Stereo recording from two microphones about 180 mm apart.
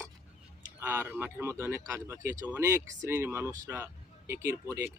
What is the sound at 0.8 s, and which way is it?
Speech, 10° right (ahead or behind).